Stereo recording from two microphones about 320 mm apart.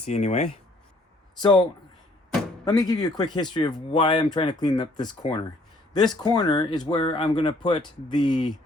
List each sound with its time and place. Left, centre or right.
0.0 s speech: centre
2.6 s speech: centre